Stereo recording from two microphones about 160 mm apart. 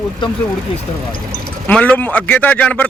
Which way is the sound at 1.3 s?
10° left (ahead or behind).